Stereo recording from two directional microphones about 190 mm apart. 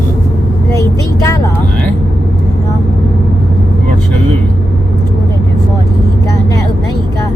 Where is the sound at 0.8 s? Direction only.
15° left (ahead or behind).